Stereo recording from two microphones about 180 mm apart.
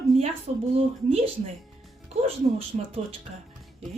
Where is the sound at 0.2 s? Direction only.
35° right (ahead or behind).